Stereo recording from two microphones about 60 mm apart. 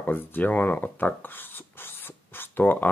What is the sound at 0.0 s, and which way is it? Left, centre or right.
Speech, left.